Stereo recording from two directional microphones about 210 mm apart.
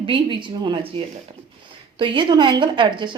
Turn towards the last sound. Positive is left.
turn(degrees=-20)  # may be behind; listen again after turning